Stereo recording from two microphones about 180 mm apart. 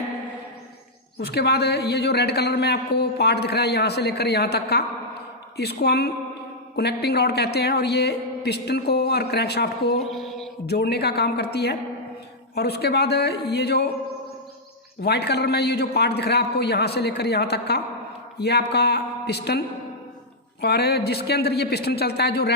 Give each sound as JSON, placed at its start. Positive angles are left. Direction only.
{"t": 1.2, "sound": "a man's voice", "side_deg": 65}
{"t": 10.0, "sound": "mantra", "side_deg": 0}
{"t": 10.7, "sound": "a man's voice", "side_deg": 65}
{"t": 15.0, "sound": "a man's voice", "side_deg": 65}